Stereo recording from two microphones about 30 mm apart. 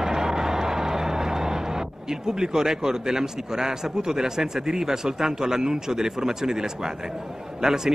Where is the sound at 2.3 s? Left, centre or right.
Right.